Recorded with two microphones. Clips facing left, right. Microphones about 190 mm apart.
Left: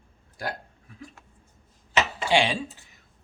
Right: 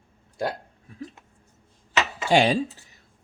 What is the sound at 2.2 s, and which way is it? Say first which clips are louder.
Speech: right 6 dB; 40° right (ahead or behind).